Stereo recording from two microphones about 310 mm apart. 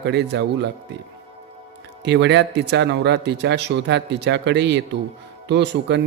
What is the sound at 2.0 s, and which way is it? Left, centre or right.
Speech, right.